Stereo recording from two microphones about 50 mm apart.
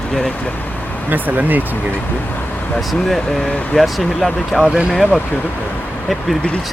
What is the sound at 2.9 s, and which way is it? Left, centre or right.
Speech, centre.